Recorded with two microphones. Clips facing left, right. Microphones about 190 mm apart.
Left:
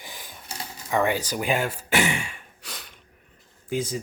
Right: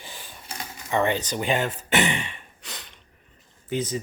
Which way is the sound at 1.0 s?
10° left (ahead or behind).